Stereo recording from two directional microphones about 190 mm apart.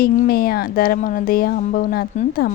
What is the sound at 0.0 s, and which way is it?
Speech, 55° left (ahead or behind).